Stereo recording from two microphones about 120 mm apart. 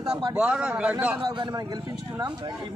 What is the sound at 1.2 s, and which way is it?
Speech, 40° right (ahead or behind).